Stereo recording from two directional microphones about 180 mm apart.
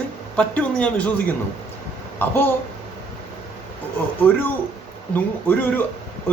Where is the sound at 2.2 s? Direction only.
10° left (ahead or behind).